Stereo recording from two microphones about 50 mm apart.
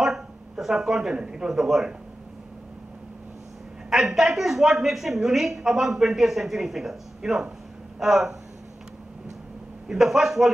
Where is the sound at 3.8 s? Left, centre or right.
Centre.